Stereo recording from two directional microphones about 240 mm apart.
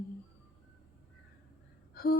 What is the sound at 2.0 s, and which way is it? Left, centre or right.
Gasp, left.